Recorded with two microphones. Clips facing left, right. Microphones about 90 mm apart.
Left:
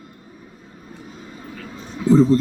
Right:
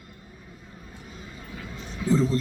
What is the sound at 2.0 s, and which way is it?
Speech, 35° left (ahead or behind).